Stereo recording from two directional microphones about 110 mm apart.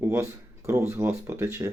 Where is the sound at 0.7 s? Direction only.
25° right (ahead or behind).